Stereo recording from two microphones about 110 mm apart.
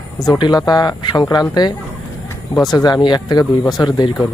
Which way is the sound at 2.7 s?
40° left (ahead or behind).